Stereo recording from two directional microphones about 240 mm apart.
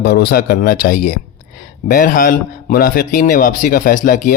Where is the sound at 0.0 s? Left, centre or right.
Left.